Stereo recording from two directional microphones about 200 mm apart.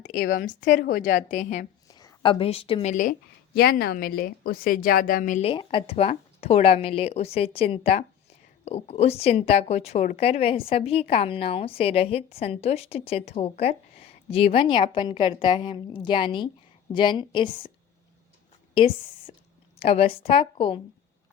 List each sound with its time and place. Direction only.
0.1 s a woman's voice: 45° left (ahead or behind)
1.9 s a woman's voice: 20° left (ahead or behind); by 5.5 s 40° left (ahead or behind)
5.5 s speech: 25° left (ahead or behind)
18.7 s a woman's voice: 25° left (ahead or behind)